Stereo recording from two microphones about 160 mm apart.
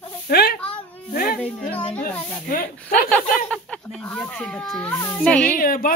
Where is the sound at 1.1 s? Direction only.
65° left (ahead or behind).